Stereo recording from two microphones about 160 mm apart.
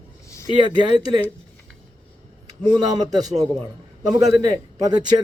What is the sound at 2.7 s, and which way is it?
Speech, 25° right (ahead or behind).